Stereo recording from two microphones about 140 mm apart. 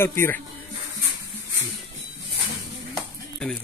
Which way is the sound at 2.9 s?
5° left (ahead or behind).